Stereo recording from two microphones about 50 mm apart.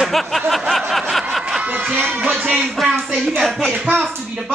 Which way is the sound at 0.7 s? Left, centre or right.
Centre.